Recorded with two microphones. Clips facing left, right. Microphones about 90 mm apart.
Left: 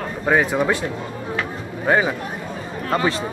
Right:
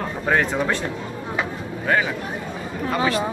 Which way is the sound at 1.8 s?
20° left (ahead or behind).